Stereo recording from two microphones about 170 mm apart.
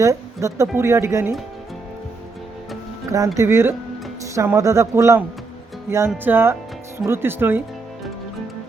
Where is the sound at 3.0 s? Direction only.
20° right (ahead or behind).